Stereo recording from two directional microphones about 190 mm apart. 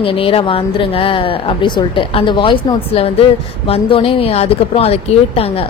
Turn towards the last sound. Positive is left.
turn(degrees=30)  # may be behind; listen again after turning